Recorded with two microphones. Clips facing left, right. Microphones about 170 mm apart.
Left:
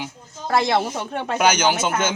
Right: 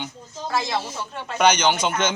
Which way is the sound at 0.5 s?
60° left (ahead or behind).